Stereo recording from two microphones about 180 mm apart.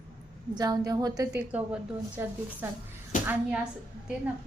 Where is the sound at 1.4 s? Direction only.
10° right (ahead or behind).